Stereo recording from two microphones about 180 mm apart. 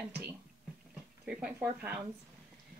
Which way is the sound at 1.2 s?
5° right (ahead or behind).